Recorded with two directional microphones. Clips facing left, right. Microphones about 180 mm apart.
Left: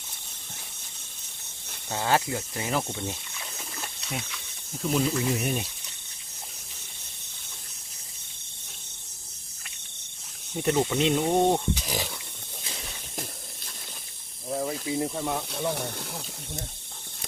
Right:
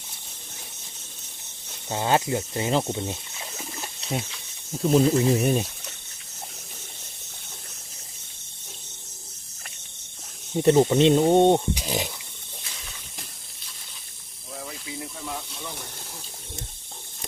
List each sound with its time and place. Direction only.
1.9 s speech: 20° right (ahead or behind)
10.7 s speech: 35° right (ahead or behind); by 12.0 s 20° right (ahead or behind)
14.5 s speech: 40° left (ahead or behind)
15.4 s speech: 65° left (ahead or behind)